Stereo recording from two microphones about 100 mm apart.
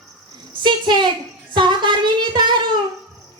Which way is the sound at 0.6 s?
50° right (ahead or behind).